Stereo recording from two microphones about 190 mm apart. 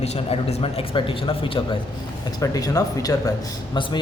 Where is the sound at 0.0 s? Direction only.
35° left (ahead or behind).